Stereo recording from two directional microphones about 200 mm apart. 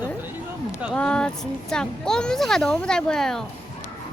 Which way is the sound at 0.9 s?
5° left (ahead or behind).